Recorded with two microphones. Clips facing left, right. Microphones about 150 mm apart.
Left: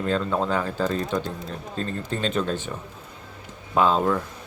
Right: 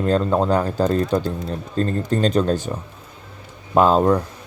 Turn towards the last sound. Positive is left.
turn(degrees=-40)  # may be behind; listen again after turning